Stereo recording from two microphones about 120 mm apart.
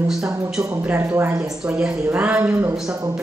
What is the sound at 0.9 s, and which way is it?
Speech, 15° right (ahead or behind).